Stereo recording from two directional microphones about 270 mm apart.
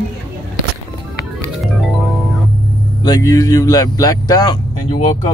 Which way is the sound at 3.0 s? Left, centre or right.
Centre.